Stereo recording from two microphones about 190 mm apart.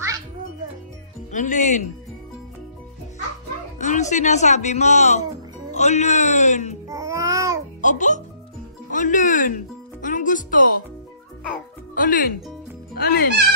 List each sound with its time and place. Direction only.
1.3 s speech: 40° left (ahead or behind)
3.7 s speech: 40° left (ahead or behind)
6.9 s music: 15° right (ahead or behind)
7.8 s a child's voice: 40° left (ahead or behind)
10.0 s music: 45° left (ahead or behind)
11.9 s speech: 45° left (ahead or behind)